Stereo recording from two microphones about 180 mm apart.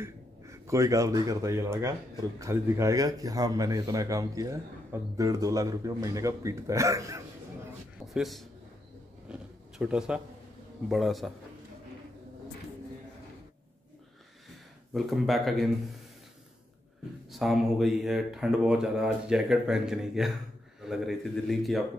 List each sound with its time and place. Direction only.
0.0 s speech: 15° right (ahead or behind)
8.1 s a man's voice: centre (ahead or behind)
9.3 s a sound: 5° right (ahead or behind)
10.9 s speech: centre (ahead or behind)
15.0 s speech: centre (ahead or behind)
17.3 s speech: centre (ahead or behind)